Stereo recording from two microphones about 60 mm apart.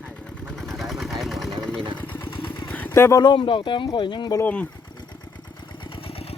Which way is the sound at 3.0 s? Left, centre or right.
Left.